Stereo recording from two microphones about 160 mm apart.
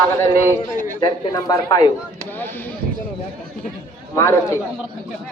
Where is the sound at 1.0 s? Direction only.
25° left (ahead or behind).